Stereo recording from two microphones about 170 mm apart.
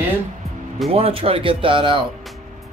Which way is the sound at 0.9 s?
35° right (ahead or behind).